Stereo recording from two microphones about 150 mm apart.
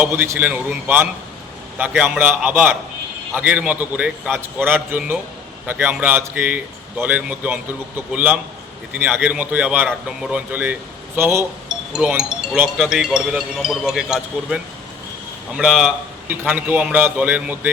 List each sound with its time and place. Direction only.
0.0 s a man's voice: 15° right (ahead or behind)
11.7 s speech: 5° right (ahead or behind)
16.2 s a man's voice: 15° right (ahead or behind)